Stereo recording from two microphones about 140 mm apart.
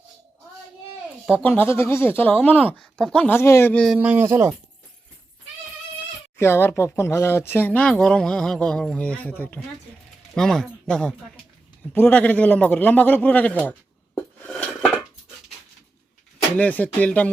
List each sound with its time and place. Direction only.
1.4 s speech: 10° left (ahead or behind)
3.3 s speech: 20° left (ahead or behind)
3.9 s speech: 10° right (ahead or behind)
6.4 s speech: 15° left (ahead or behind)
14.2 s dishes: 10° left (ahead or behind)
16.6 s speech: 10° left (ahead or behind)